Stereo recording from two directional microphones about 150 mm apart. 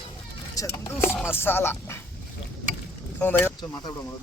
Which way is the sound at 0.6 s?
20° left (ahead or behind).